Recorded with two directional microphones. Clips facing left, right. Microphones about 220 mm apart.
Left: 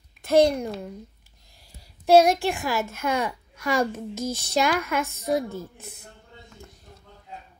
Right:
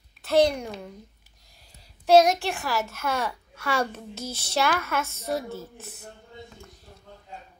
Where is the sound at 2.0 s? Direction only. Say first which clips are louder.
Left 1 dB; 10° left (ahead or behind).